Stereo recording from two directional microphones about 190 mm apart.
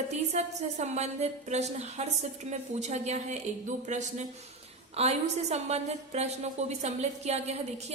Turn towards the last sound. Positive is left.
turn(degrees=-35)  # may be behind; listen again after turning